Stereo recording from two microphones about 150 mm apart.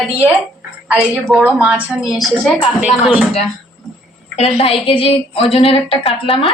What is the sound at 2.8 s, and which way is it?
Speech, 5° right (ahead or behind).